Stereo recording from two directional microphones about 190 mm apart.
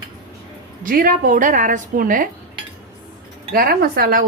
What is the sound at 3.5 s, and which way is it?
Speech, 50° right (ahead or behind).